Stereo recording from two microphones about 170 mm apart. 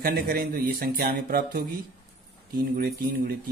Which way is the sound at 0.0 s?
60° right (ahead or behind).